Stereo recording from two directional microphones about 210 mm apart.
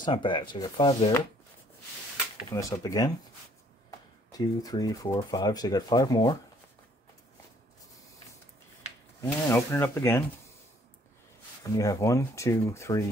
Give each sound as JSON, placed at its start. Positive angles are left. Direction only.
{"t": 0.0, "sound": "speech", "side_deg": 20}
{"t": 2.5, "sound": "speech", "side_deg": 15}
{"t": 4.3, "sound": "speech", "side_deg": 15}
{"t": 9.5, "sound": "speech", "side_deg": 10}
{"t": 11.6, "sound": "speech", "side_deg": 15}